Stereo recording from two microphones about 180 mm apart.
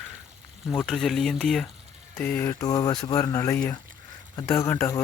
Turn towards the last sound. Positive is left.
turn(degrees=15)  # may be behind; listen again after turning